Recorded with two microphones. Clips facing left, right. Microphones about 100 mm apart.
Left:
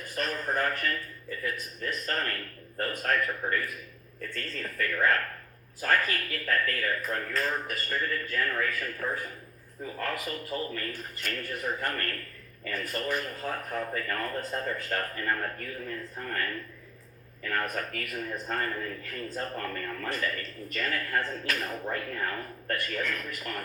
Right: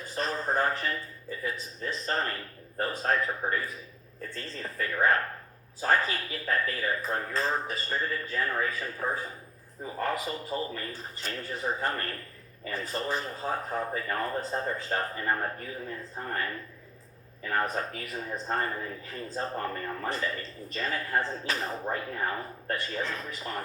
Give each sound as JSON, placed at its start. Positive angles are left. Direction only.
{"t": 0.0, "sound": "a man's voice", "side_deg": -30}